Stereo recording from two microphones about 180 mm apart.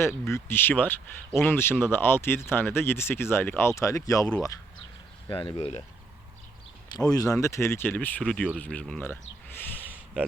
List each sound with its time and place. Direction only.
0.0 s speech: 15° left (ahead or behind)
5.4 s speech: 30° left (ahead or behind)
6.9 s speech: 20° left (ahead or behind)